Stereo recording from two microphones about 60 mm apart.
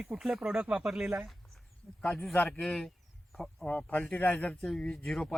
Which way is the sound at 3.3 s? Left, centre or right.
Centre.